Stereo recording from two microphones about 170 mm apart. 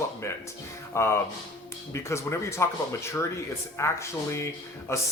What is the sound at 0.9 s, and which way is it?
Speech, 15° left (ahead or behind).